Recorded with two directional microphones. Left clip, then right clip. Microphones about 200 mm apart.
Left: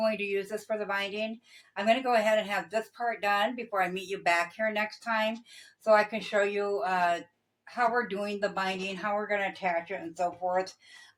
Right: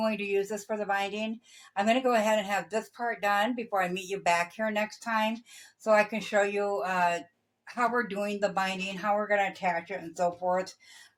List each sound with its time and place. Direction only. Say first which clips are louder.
0.0 s a woman's voice: even; 35° right (ahead or behind)